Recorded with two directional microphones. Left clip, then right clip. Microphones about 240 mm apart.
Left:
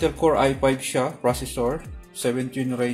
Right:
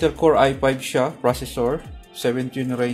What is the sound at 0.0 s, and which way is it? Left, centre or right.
Speech, centre.